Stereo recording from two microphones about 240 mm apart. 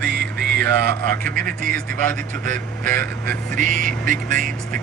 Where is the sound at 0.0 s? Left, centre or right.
Right.